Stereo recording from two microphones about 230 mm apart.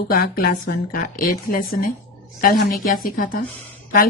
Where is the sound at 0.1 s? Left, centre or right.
Left.